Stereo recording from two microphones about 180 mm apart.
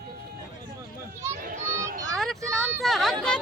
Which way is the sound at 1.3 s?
45° right (ahead or behind).